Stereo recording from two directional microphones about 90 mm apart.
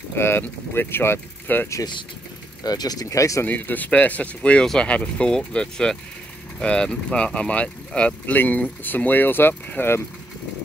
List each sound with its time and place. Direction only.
0.2 s speech: 25° left (ahead or behind)
2.6 s speech: 45° left (ahead or behind)
3.4 s speech: 20° left (ahead or behind)